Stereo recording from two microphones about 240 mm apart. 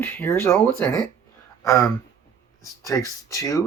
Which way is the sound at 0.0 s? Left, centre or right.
Centre.